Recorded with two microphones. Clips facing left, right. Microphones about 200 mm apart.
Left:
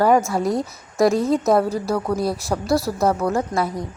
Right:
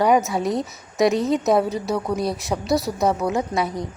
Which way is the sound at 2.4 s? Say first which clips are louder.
Left 1 dB; 20° right (ahead or behind).